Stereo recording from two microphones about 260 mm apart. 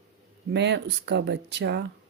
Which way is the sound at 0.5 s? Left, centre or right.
Right.